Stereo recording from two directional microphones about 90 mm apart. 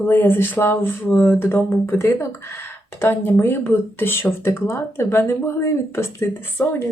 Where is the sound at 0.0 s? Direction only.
20° left (ahead or behind).